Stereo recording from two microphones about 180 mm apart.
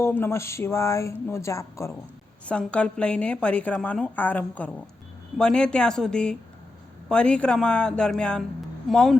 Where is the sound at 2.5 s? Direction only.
5° left (ahead or behind).